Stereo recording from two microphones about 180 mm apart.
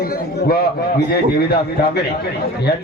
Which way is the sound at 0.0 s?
55° left (ahead or behind).